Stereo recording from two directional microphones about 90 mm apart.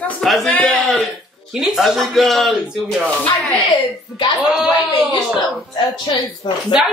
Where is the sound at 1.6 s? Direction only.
Centre (ahead or behind).